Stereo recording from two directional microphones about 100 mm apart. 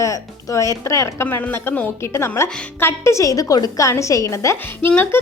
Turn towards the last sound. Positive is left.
turn(degrees=20)  # may be behind; listen again after turning